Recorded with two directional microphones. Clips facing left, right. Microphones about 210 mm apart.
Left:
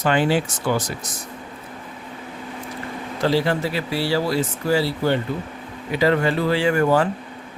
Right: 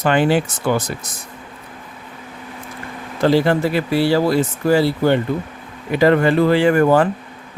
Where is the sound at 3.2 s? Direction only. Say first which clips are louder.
Right 5 dB; 55° right (ahead or behind).